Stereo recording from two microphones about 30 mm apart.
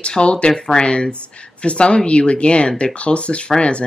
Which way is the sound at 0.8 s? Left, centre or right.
Left.